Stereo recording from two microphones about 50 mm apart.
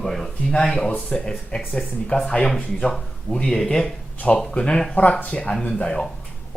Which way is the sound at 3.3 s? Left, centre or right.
Centre.